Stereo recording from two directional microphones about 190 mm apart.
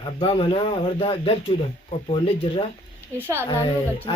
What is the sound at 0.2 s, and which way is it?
Speech, 30° left (ahead or behind).